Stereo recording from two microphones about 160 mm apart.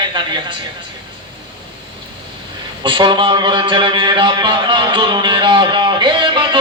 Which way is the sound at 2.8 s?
30° right (ahead or behind).